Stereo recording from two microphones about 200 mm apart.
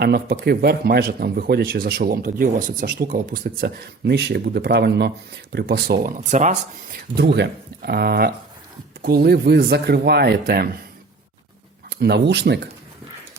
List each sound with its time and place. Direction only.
0.0 s a man's voice: 50° right (ahead or behind)
7.2 s a man's voice: 60° right (ahead or behind)
11.9 s speech: 55° right (ahead or behind)